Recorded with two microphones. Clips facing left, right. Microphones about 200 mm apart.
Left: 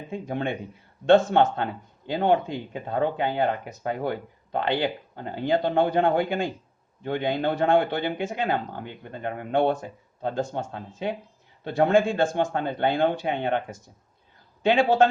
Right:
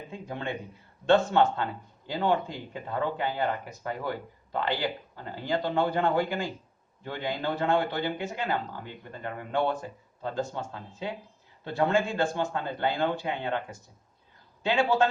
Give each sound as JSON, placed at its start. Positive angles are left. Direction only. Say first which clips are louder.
{"t": 0.1, "sound": "speech", "louder": "left 7 dB", "side_deg": 55}
{"t": 14.7, "sound": "speech", "louder": "left 5 dB", "side_deg": 55}